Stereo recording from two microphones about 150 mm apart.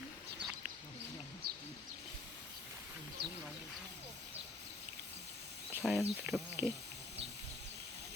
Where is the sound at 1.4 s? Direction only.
90° right.